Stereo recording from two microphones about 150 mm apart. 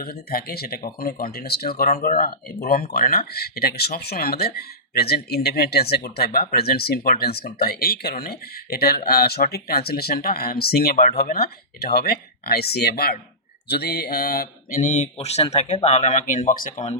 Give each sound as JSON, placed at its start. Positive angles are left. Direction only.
{"t": 0.0, "sound": "speech", "side_deg": 90}
{"t": 11.2, "sound": "speech", "side_deg": 90}